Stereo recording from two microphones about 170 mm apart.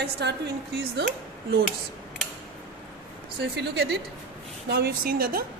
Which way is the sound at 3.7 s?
70° right (ahead or behind).